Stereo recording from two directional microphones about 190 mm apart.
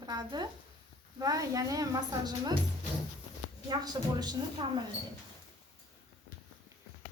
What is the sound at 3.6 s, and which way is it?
A woman's voice, 20° right (ahead or behind).